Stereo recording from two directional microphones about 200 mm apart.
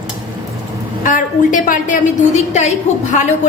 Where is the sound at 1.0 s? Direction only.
40° left (ahead or behind).